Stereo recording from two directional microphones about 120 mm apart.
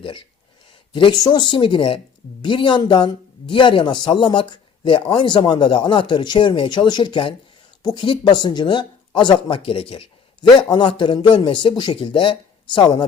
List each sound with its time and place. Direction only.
0.0 s speech: 45° left (ahead or behind)